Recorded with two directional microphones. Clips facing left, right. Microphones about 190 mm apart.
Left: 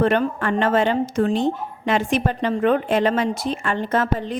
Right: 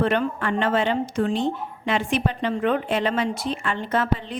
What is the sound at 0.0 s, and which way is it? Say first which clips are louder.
A woman's voice: left 3 dB; 45° left (ahead or behind).